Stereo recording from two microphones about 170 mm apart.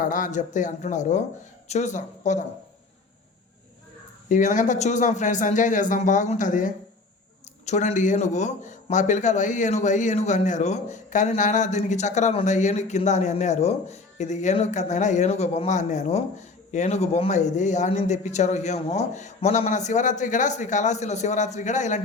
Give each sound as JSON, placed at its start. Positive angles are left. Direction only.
{"t": 0.0, "sound": "a man's voice", "side_deg": 50}
{"t": 4.3, "sound": "a man's voice", "side_deg": 45}